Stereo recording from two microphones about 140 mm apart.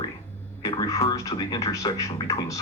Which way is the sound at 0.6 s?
30° left (ahead or behind).